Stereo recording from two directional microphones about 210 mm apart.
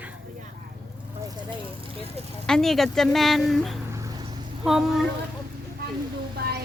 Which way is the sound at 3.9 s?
15° right (ahead or behind).